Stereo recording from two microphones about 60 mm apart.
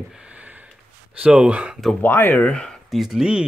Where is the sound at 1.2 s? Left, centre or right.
Centre.